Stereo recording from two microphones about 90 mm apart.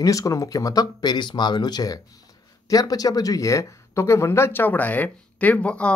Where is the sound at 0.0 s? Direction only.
40° left (ahead or behind).